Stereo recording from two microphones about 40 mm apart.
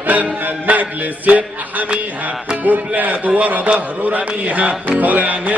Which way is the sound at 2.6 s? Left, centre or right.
Right.